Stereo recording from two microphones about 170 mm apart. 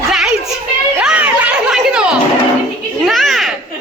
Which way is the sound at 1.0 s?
5° right (ahead or behind).